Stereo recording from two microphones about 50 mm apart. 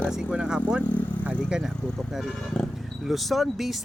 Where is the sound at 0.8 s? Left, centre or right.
Left.